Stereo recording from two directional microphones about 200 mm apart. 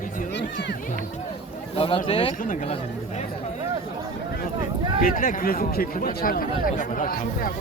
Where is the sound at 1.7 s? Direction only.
30° left (ahead or behind).